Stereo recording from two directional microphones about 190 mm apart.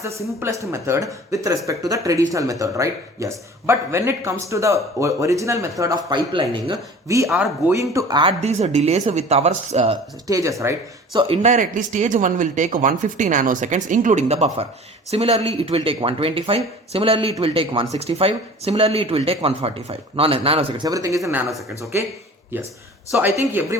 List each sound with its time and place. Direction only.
0.0 s speech: 15° right (ahead or behind)
7.1 s speech: 15° right (ahead or behind); by 10.0 s 30° right (ahead or behind)
10.2 s speech: 15° right (ahead or behind)
11.4 s speech: 40° right (ahead or behind); by 21.4 s 15° right (ahead or behind)
22.5 s speech: 10° right (ahead or behind)